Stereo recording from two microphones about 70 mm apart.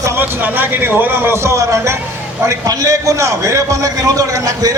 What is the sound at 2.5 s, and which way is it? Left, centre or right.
A man's voice, right.